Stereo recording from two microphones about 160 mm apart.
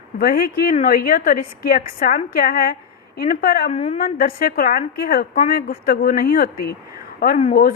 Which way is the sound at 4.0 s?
65° left (ahead or behind).